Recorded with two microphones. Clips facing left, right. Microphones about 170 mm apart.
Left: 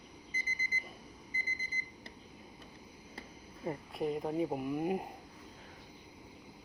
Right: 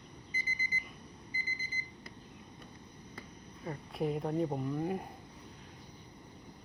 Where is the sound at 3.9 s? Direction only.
Centre (ahead or behind); by 5.1 s 20° left (ahead or behind).